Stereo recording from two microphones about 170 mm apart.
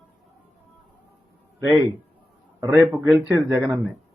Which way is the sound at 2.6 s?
10° right (ahead or behind).